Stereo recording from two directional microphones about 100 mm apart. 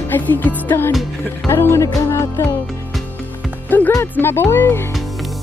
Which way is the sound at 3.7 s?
20° left (ahead or behind).